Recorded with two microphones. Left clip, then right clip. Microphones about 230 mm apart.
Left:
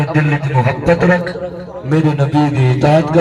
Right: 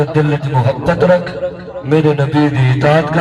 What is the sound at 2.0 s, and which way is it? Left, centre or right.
Speech, left.